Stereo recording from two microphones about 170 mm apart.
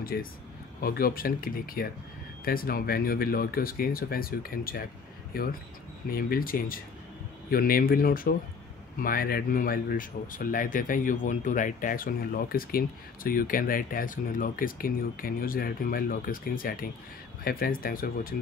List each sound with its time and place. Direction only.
0.0 s speech: 60° left (ahead or behind)